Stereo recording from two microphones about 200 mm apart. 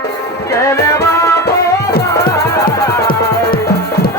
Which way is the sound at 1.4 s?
55° left (ahead or behind).